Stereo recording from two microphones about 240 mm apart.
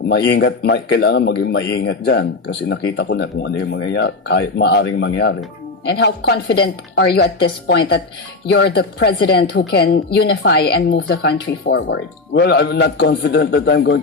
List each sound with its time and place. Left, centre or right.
0.1 s a woman's voice: left